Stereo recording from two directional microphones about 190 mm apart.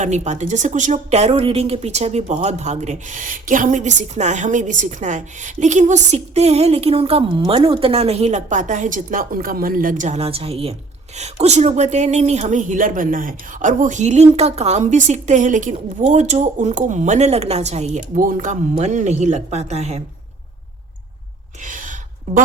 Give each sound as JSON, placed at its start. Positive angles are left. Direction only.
{"t": 0.0, "sound": "speech", "side_deg": -40}
{"t": 21.6, "sound": "gasp", "side_deg": -45}